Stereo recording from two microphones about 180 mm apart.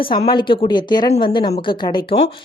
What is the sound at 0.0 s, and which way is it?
A woman's voice, 25° left (ahead or behind).